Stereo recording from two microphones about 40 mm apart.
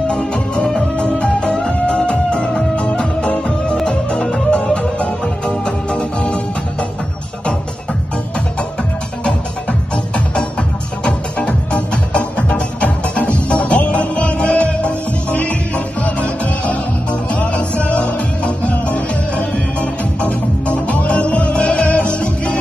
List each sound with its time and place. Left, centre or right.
0.1 s music: left
9.2 s music: left
11.7 s music: left